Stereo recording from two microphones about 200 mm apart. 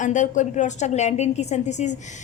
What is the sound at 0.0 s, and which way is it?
A woman's voice, 40° left (ahead or behind).